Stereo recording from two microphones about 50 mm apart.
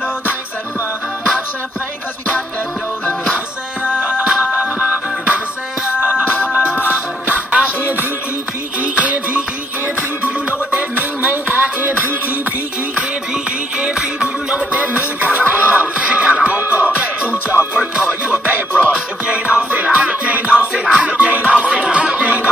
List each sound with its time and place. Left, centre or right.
3.8 s music: right
6.8 s music: right
13.7 s music: centre
14.7 s music: right; by 21.2 s centre
21.2 s music: right